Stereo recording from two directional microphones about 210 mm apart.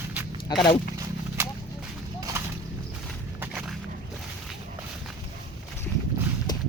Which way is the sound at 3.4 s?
5° right (ahead or behind).